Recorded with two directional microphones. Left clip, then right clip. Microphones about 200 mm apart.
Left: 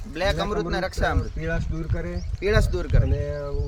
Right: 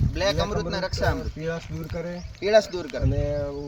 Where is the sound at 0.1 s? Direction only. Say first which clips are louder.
Even; 10° left (ahead or behind).